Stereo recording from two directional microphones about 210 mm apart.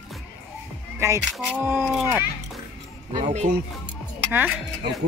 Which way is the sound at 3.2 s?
35° right (ahead or behind).